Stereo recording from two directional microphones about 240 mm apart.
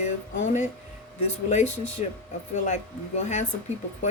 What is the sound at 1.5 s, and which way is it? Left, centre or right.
Speech, left.